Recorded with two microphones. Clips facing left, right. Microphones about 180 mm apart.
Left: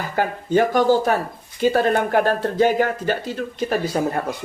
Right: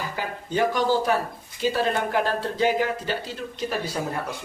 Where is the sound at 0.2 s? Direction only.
50° left (ahead or behind).